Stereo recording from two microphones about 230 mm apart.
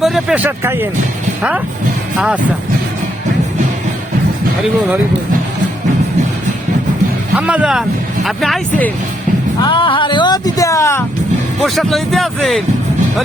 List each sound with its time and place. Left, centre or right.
0.0 s speech: centre
7.3 s speech: centre
9.6 s speech: left
11.6 s speech: centre